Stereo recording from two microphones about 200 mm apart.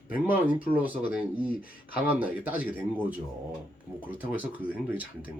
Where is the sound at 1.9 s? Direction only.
10° right (ahead or behind).